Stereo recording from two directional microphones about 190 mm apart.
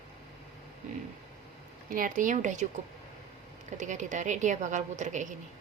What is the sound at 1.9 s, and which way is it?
Speech, 45° right (ahead or behind).